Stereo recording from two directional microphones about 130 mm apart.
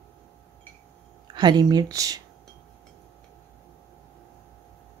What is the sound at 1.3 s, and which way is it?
Speech, 35° right (ahead or behind).